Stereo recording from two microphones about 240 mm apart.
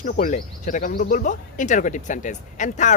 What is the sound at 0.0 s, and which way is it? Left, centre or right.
Speech, left.